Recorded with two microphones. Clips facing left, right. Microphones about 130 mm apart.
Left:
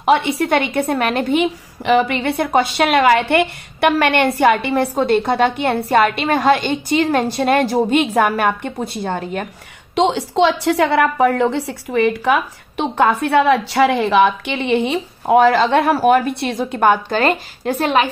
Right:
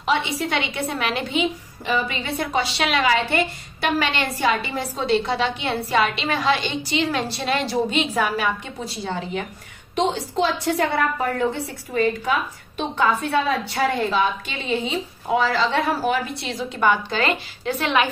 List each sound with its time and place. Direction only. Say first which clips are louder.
0.0 s a woman's voice: left 7 dB; 55° left (ahead or behind)
9.9 s a woman's voice: left 6 dB; 85° left; by 18.0 s 45° left (ahead or behind)